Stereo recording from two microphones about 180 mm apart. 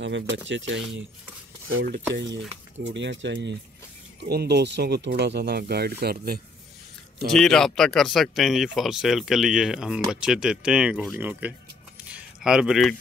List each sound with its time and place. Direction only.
0.0 s speech: 85° right
1.8 s speech: 75° right (ahead or behind)
4.2 s speech: 65° right (ahead or behind)
7.3 s speech: centre (ahead or behind)
12.1 s keys jangling: 5° right (ahead or behind)